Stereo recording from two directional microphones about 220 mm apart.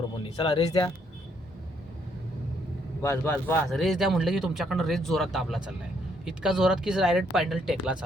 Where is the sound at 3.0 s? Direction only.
15° left (ahead or behind).